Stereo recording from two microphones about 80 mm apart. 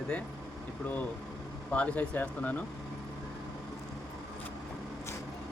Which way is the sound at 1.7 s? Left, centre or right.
Centre.